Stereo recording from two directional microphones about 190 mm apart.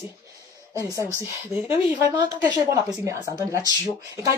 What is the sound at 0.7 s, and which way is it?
Speech, 15° right (ahead or behind).